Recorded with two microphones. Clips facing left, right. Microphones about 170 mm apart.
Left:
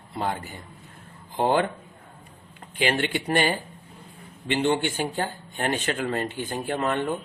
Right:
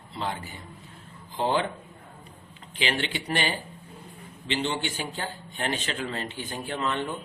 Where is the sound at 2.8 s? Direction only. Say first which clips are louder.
Left 5 dB; 50° left (ahead or behind).